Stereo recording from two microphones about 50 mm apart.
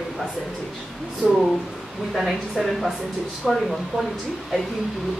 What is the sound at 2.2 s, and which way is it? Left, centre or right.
A woman's voice, centre.